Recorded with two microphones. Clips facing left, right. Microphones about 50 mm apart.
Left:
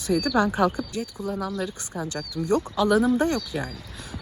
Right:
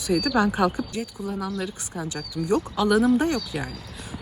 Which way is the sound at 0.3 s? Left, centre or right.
Right.